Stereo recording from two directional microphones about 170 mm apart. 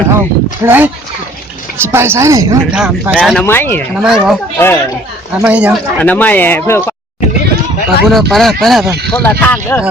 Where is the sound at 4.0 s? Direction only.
5° right (ahead or behind).